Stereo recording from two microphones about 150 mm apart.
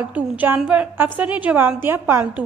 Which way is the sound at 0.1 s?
10° right (ahead or behind).